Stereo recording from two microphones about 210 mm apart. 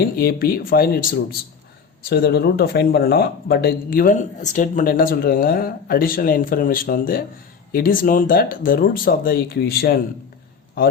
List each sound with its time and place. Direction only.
0.2 s speech: 45° left (ahead or behind)